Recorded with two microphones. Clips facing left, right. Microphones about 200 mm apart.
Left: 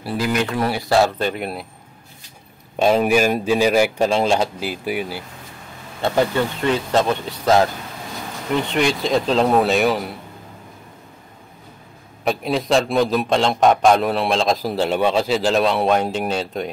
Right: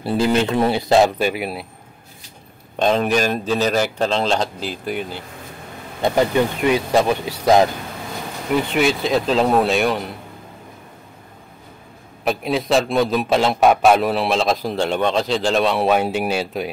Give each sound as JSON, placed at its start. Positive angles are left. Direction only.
{"t": 0.0, "sound": "speech", "side_deg": -25}
{"t": 2.8, "sound": "a man's voice", "side_deg": 10}
{"t": 6.0, "sound": "a man's voice", "side_deg": -15}
{"t": 12.3, "sound": "a man's voice", "side_deg": 0}